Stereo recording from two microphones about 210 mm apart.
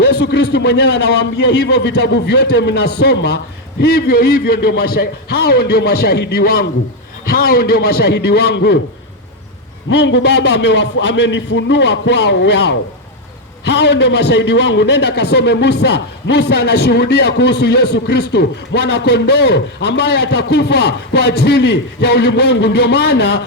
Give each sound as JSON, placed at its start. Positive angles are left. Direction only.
{"t": 0.2, "sound": "a man's voice", "side_deg": 55}
{"t": 9.9, "sound": "a man's voice", "side_deg": 55}